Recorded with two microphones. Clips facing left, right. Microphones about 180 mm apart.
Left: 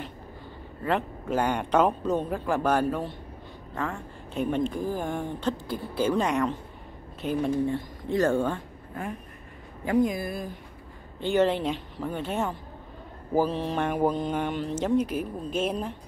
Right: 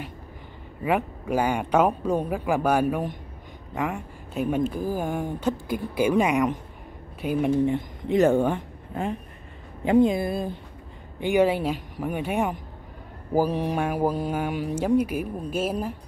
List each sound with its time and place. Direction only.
1.2 s speech: 10° right (ahead or behind)
4.3 s a woman's voice: 5° right (ahead or behind); by 10.6 s 25° right (ahead or behind)
11.1 s speech: 15° right (ahead or behind)